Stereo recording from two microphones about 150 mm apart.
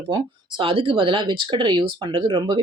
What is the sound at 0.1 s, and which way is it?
Speech, 35° right (ahead or behind).